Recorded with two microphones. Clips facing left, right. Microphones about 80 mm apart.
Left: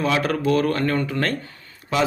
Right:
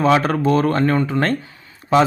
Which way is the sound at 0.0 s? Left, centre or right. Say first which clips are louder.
Right 5 dB; right.